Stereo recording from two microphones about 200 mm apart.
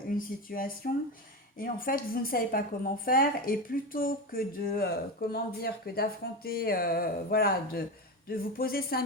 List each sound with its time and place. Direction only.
0.1 s a woman's voice: 45° left (ahead or behind)